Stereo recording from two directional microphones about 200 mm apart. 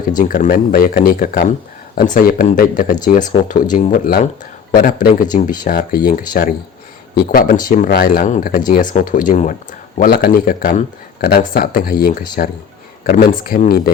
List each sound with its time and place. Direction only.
0.2 s speech: 40° left (ahead or behind)